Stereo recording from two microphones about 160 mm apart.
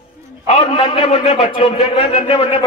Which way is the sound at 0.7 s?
40° left (ahead or behind).